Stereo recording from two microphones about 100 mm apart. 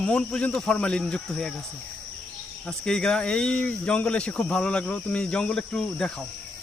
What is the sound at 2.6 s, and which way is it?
Speech, 10° left (ahead or behind).